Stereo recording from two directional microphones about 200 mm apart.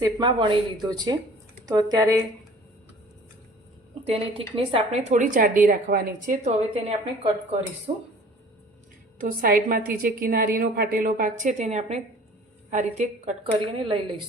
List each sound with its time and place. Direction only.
0.0 s speech: 20° right (ahead or behind)
4.0 s speech: 30° right (ahead or behind)
9.1 s a woman's voice: 45° right (ahead or behind); by 14.0 s 25° right (ahead or behind)